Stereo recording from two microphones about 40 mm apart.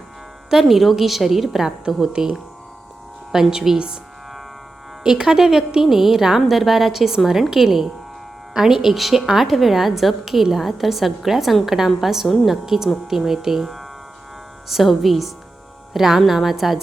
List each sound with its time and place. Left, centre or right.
0.5 s a woman's voice: centre
2.1 s a woman's voice: centre
3.5 s a woman's voice: centre
5.0 s a woman's voice: centre